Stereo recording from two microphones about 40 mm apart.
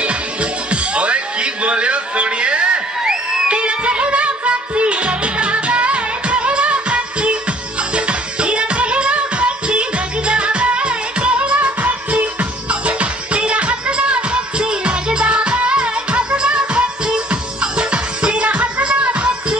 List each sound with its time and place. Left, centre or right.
0.0 s music: right
3.0 s crowd: centre
3.4 s music: right